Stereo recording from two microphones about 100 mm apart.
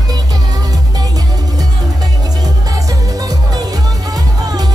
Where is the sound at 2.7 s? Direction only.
35° right (ahead or behind).